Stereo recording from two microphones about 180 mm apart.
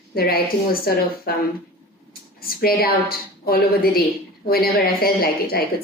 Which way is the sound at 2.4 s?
55° left (ahead or behind).